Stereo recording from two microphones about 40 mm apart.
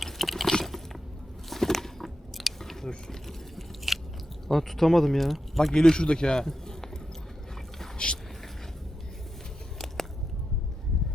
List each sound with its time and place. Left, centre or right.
0.0 s biting: centre
4.4 s speech: centre
5.7 s speech: centre
6.4 s a sound: centre
7.9 s boat: left
9.7 s a sound: centre